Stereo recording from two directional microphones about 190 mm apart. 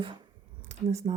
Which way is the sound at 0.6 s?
35° right (ahead or behind).